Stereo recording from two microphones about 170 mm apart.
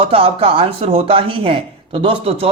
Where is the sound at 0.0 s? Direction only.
35° right (ahead or behind).